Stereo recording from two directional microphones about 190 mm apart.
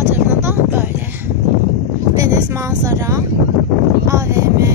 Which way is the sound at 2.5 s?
15° right (ahead or behind).